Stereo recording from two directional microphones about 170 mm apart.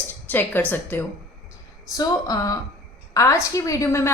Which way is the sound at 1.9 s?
20° left (ahead or behind).